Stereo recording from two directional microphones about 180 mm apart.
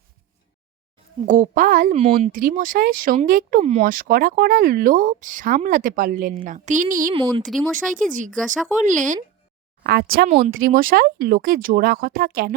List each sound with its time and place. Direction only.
1.3 s speech: 45° right (ahead or behind)
7.1 s speech: 25° right (ahead or behind)
7.9 s speech: 45° right (ahead or behind)
8.4 s speech: 5° right (ahead or behind)
8.7 s speech: 45° right (ahead or behind)
9.8 s speech: 60° right (ahead or behind)
10.2 s speech: 40° right (ahead or behind)